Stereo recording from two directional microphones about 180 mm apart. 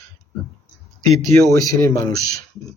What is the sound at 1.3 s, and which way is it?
Speech, 15° left (ahead or behind).